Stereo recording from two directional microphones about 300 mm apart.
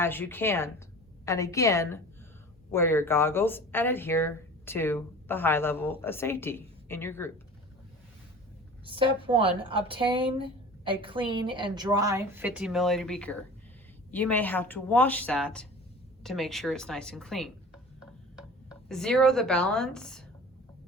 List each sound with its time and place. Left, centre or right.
0.0 s speech: centre
8.9 s speech: centre
18.9 s speech: centre